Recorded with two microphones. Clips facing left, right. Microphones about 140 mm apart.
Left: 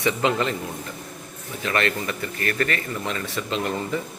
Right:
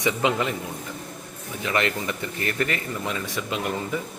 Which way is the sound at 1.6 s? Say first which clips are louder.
Left 1 dB; 20° right (ahead or behind).